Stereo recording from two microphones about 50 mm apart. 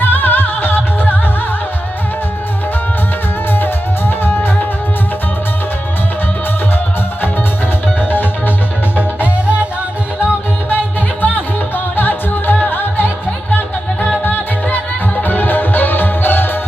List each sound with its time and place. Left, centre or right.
0.0 s music: left
4.2 s music: left
7.9 s music: left
9.0 s music: right
10.7 s music: left
14.3 s music: left